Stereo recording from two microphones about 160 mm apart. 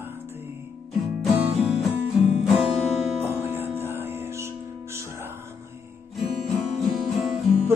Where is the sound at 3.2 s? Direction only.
15° right (ahead or behind).